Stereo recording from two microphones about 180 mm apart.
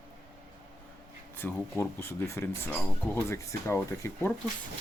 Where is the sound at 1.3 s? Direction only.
10° left (ahead or behind).